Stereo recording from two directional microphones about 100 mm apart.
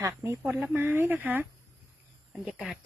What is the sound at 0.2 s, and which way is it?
Speech, 25° right (ahead or behind).